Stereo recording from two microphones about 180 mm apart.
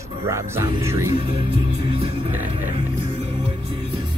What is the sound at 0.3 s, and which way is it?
Speech, 15° right (ahead or behind).